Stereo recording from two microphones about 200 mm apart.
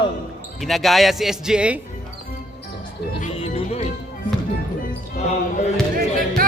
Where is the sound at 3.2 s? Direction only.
30° left (ahead or behind).